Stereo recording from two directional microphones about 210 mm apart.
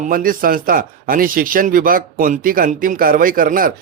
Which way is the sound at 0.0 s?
40° right (ahead or behind).